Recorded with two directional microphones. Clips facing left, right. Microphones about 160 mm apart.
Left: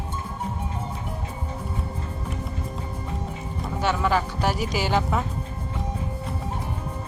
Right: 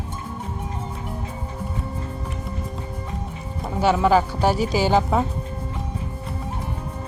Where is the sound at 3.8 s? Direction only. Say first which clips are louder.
Right 6 dB; 30° right (ahead or behind).